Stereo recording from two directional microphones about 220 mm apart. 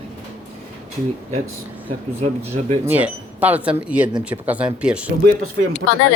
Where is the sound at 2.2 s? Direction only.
30° right (ahead or behind).